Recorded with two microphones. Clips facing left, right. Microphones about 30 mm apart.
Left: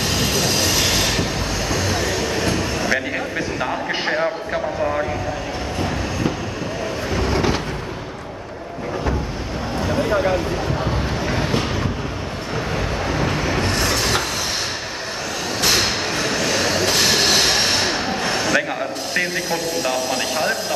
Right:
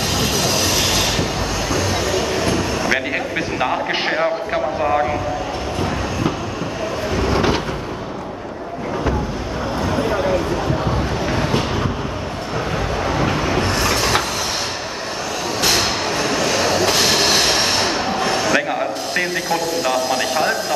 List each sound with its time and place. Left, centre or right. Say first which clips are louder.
0.1 s train: right 2 dB; centre
1.7 s vehicle: right 1 dB; centre
2.1 s train: right 2 dB; centre
2.9 s a sound: right 2 dB; right
4.8 s speech: right 6 dB; centre
7.3 s a sound: right 3 dB; centre
9.8 s vehicle: left 1 dB; centre
12.7 s vehicle: right 2 dB; centre
15.6 s train: right 1 dB; centre